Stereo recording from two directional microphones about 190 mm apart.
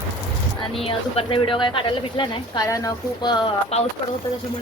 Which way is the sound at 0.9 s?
30° left (ahead or behind).